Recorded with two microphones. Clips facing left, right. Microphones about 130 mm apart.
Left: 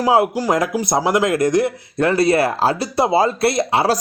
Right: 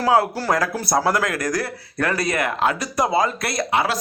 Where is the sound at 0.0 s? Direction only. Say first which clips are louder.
Left 3 dB; 20° left (ahead or behind).